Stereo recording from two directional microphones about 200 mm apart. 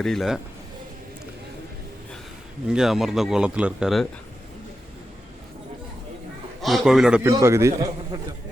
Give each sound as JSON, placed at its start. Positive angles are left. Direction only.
{"t": 0.0, "sound": "speech", "side_deg": 0}
{"t": 2.6, "sound": "speech", "side_deg": -5}
{"t": 6.6, "sound": "a man's voice", "side_deg": 0}
{"t": 7.3, "sound": "a man's voice", "side_deg": -15}